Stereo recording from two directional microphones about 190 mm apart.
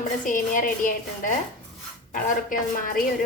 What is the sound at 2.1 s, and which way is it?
Speech, 45° left (ahead or behind).